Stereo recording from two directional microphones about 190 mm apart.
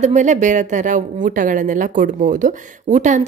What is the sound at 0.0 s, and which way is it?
A woman's voice, 40° right (ahead or behind).